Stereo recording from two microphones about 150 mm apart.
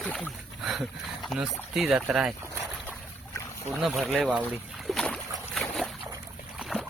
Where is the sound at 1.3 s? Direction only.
5° right (ahead or behind).